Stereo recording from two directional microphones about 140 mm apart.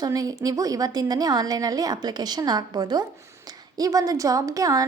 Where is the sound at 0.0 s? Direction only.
25° right (ahead or behind).